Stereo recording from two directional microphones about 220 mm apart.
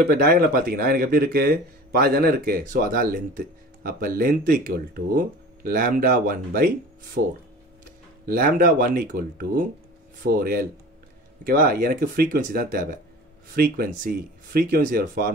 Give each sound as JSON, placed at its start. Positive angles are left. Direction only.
{"t": 0.1, "sound": "speech", "side_deg": -40}
{"t": 8.3, "sound": "speech", "side_deg": -40}